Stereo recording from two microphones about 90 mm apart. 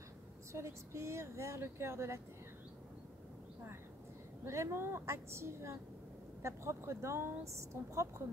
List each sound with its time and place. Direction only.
0.5 s speech: 30° right (ahead or behind)
4.5 s speech: 30° right (ahead or behind)